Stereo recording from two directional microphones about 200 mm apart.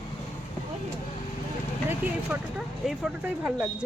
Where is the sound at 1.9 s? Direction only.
5° right (ahead or behind).